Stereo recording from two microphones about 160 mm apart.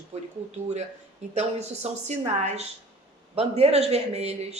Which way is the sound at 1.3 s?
45° right (ahead or behind).